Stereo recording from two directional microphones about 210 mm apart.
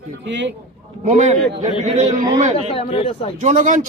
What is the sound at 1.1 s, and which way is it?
A man's voice, 30° right (ahead or behind).